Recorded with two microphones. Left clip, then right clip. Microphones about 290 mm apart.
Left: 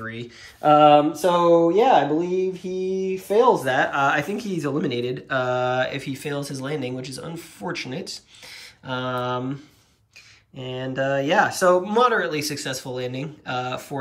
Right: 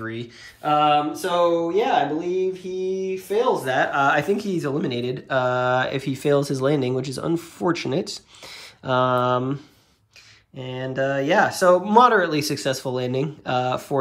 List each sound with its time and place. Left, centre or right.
0.0 s speech: centre
10.6 s speech: centre